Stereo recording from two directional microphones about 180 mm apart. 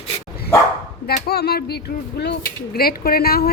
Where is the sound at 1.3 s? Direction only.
60° left (ahead or behind).